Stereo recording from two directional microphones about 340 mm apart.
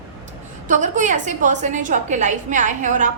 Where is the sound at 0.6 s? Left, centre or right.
Right.